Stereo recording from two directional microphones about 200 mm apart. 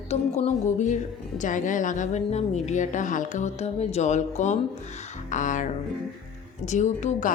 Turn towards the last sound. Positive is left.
turn(degrees=35)  # may be behind; listen again after turning